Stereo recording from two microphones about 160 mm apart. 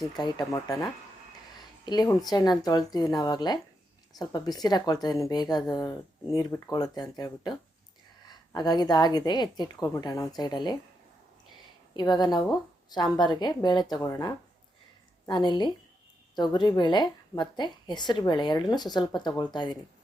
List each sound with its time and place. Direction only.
0.2 s a woman's voice: 25° left (ahead or behind)
1.8 s a woman's voice: 25° left (ahead or behind)
8.3 s a woman's voice: 25° left (ahead or behind)
11.9 s a woman's voice: 25° left (ahead or behind)